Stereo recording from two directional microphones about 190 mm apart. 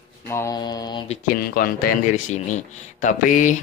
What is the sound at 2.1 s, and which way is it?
Speech, 40° left (ahead or behind).